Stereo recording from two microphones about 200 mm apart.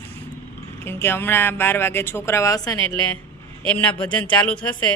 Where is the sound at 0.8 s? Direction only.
10° left (ahead or behind).